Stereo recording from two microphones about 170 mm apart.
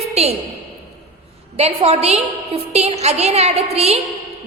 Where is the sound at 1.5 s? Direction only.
35° right (ahead or behind).